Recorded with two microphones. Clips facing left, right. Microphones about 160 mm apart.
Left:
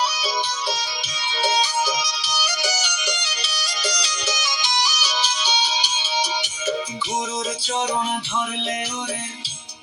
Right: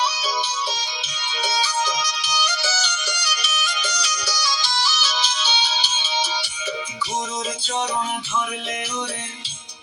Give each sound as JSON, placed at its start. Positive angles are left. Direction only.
{"t": 1.8, "sound": "music", "side_deg": 5}